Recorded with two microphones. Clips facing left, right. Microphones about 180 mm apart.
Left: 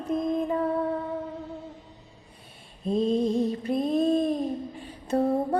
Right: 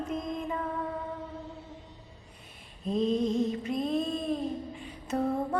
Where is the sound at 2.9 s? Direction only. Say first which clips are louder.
Left 3 dB; 30° left (ahead or behind).